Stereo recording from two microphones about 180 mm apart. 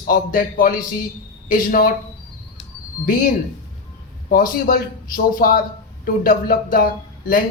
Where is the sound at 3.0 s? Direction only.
50° left (ahead or behind).